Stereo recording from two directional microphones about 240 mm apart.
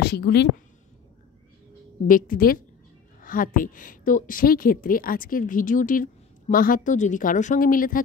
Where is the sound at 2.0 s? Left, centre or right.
Left.